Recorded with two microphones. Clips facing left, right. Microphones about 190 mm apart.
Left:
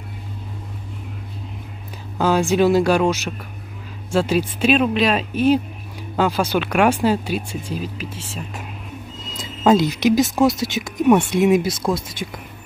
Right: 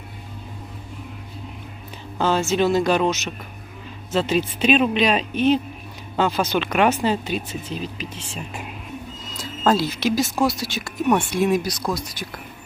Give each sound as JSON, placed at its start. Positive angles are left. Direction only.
{"t": 2.1, "sound": "speech", "side_deg": 10}
{"t": 9.4, "sound": "speech", "side_deg": 15}